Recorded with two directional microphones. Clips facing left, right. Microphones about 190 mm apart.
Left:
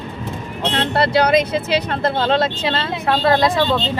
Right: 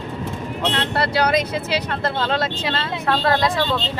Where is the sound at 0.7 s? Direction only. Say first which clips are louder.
Left 6 dB; 25° left (ahead or behind).